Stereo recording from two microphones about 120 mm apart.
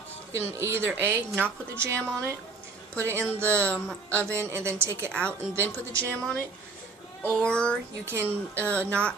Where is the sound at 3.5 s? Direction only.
10° left (ahead or behind).